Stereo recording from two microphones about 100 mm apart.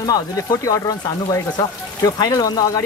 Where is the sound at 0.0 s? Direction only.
40° left (ahead or behind).